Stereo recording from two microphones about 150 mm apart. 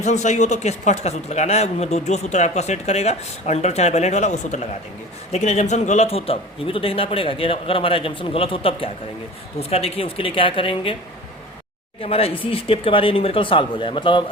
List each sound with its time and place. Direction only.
0.0 s speech: 50° left (ahead or behind); by 10.9 s 35° left (ahead or behind)
11.9 s speech: 40° left (ahead or behind)